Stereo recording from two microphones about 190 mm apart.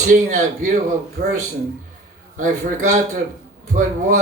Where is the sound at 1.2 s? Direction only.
60° right (ahead or behind).